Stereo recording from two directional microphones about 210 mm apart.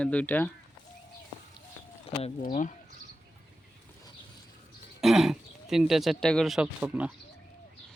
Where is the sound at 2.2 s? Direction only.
35° left (ahead or behind).